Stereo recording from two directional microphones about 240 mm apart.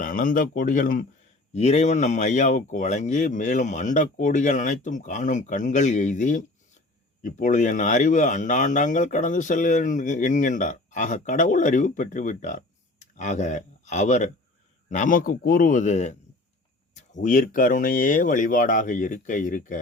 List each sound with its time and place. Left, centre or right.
0.0 s speech: left